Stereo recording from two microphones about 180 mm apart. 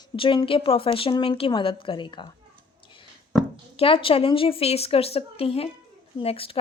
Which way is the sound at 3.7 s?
30° left (ahead or behind).